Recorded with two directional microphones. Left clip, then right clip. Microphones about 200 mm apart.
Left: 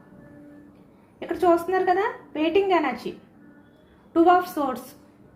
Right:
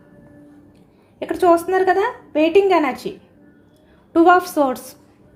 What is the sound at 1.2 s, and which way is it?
Speech, 55° right (ahead or behind).